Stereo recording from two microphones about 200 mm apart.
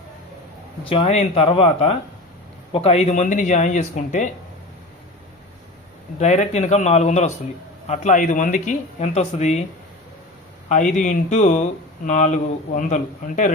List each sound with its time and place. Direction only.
0.9 s speech: 30° left (ahead or behind)
6.1 s speech: 35° left (ahead or behind)
10.7 s speech: 40° left (ahead or behind)